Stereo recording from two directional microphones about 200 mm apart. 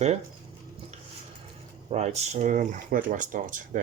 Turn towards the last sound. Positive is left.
turn(degrees=-40)  # may be behind; listen again after turning